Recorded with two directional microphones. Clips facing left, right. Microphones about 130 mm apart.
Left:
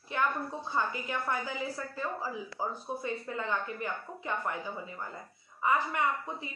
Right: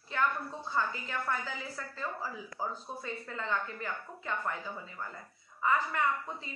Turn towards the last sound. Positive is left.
turn(degrees=15)  # may be behind; listen again after turning